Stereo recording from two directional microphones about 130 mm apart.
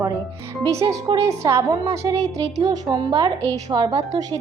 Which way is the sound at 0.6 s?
25° right (ahead or behind).